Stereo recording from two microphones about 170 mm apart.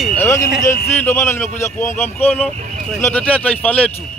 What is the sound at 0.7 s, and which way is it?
Speech, 15° left (ahead or behind).